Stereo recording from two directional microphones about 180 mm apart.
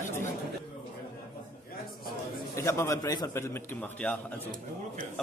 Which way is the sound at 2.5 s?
15° left (ahead or behind).